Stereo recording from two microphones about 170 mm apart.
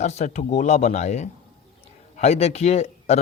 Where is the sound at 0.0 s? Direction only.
40° left (ahead or behind).